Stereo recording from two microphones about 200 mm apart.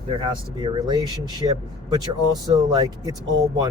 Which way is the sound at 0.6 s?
20° right (ahead or behind).